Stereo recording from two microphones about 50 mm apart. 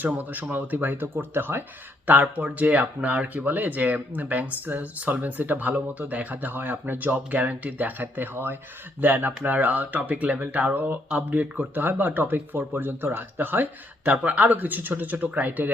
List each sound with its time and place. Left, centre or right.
0.0 s speech: right
2.0 s speech: right